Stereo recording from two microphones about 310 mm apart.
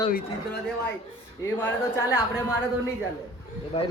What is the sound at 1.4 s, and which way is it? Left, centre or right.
Speech, centre.